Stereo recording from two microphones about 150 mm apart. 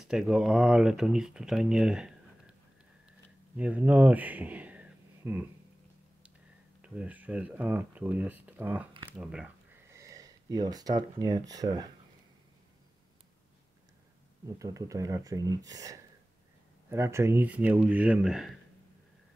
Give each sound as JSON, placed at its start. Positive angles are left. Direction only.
{"t": 0.0, "sound": "speech", "side_deg": -5}
{"t": 3.1, "sound": "a sound", "side_deg": -10}
{"t": 6.8, "sound": "speech", "side_deg": -10}
{"t": 9.8, "sound": "speech", "side_deg": -20}
{"t": 14.6, "sound": "speech", "side_deg": -20}